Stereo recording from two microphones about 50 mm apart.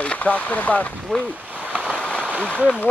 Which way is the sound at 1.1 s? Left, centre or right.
Centre.